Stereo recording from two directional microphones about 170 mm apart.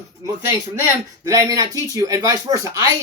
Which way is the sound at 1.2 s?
20° right (ahead or behind).